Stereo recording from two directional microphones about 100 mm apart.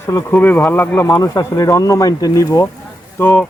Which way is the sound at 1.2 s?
35° left (ahead or behind).